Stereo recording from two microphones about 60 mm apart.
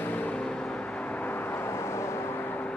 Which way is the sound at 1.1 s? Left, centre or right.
Left.